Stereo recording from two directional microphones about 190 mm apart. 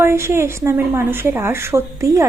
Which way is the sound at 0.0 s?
15° right (ahead or behind).